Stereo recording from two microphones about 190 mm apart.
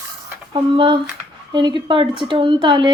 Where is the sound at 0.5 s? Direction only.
25° right (ahead or behind).